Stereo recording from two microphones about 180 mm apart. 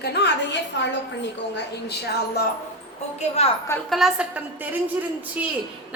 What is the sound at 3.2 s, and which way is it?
Speech, 35° left (ahead or behind).